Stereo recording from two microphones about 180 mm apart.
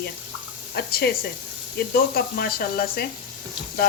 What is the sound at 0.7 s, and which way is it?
Speech, 60° left (ahead or behind).